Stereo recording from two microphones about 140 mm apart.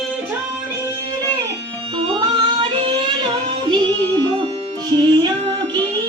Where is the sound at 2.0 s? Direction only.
35° right (ahead or behind).